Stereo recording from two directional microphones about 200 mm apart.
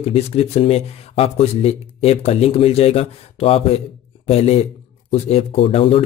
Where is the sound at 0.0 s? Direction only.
30° left (ahead or behind).